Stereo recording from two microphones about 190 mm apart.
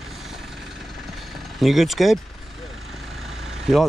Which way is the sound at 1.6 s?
Centre (ahead or behind).